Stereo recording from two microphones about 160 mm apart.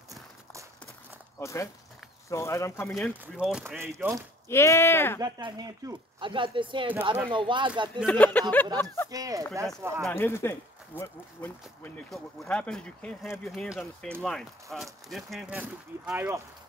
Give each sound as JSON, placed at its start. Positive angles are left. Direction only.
{"t": 0.1, "sound": "walk", "side_deg": -20}
{"t": 1.4, "sound": "speech", "side_deg": 20}
{"t": 2.9, "sound": "speech", "side_deg": 0}
{"t": 3.6, "sound": "speech", "side_deg": -15}
{"t": 4.5, "sound": "speech", "side_deg": 15}
{"t": 5.2, "sound": "speech", "side_deg": -25}
{"t": 8.1, "sound": "speech", "side_deg": 10}
{"t": 9.1, "sound": "speech", "side_deg": -20}
{"t": 10.1, "sound": "speech", "side_deg": 15}
{"t": 16.1, "sound": "speech", "side_deg": -15}